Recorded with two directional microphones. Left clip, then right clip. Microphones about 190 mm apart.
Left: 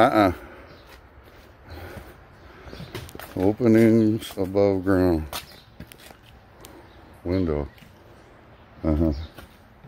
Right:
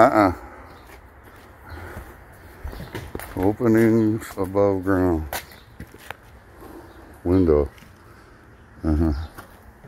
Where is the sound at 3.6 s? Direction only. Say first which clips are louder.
Even; 70° left (ahead or behind).